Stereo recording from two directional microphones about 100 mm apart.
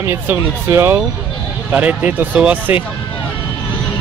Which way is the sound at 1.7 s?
15° right (ahead or behind).